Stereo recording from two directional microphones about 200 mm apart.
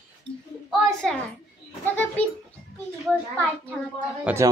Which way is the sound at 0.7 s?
Centre (ahead or behind).